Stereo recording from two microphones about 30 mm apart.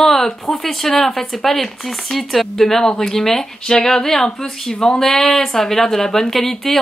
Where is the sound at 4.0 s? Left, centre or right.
Centre.